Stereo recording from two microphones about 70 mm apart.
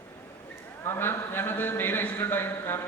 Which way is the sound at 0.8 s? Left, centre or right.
Left.